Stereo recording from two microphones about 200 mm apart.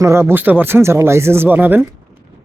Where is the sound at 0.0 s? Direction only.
15° right (ahead or behind).